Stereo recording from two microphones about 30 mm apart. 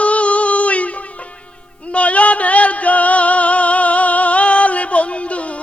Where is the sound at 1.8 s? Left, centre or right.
Left.